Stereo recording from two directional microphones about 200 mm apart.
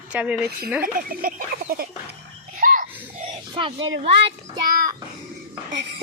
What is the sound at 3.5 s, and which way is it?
Speech, 25° right (ahead or behind).